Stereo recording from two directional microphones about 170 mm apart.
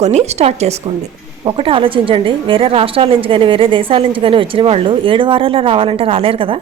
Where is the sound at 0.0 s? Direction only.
40° right (ahead or behind).